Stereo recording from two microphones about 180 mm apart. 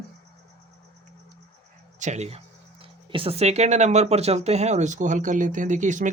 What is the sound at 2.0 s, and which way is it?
Speech, 40° right (ahead or behind).